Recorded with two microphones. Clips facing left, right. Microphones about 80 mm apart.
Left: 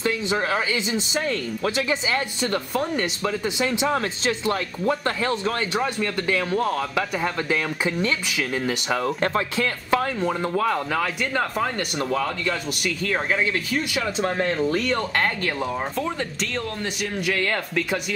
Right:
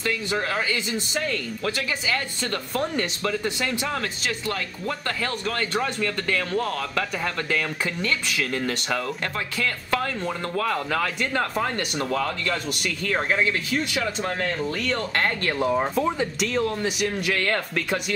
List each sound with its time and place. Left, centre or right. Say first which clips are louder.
0.0 s speech: left 3 dB; centre
2.4 s speech: left 3 dB; centre
9.0 s speech: left 6 dB; left
10.9 s speech: left 1 dB; centre
14.7 s speech: left 4 dB; centre
15.0 s speech: left 1 dB; centre